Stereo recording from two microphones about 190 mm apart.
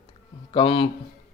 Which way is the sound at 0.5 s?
25° left (ahead or behind).